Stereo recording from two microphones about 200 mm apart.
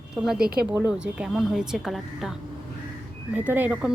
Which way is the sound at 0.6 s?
10° right (ahead or behind).